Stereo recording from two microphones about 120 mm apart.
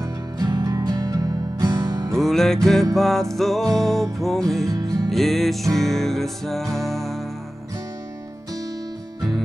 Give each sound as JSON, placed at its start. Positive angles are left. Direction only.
{"t": 0.0, "sound": "music", "side_deg": -30}
{"t": 2.1, "sound": "music", "side_deg": 5}
{"t": 4.6, "sound": "music", "side_deg": -30}
{"t": 5.1, "sound": "music", "side_deg": 0}